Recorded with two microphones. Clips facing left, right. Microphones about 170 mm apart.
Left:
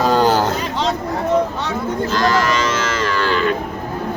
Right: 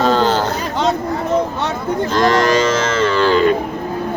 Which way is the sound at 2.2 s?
30° right (ahead or behind).